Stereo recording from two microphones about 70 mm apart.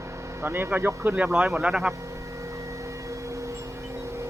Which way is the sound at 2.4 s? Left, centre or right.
Right.